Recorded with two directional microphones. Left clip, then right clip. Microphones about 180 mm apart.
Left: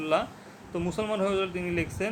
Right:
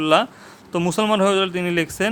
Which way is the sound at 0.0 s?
55° right (ahead or behind).